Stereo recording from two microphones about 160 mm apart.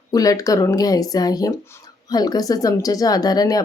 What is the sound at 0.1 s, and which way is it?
Speech, 20° left (ahead or behind).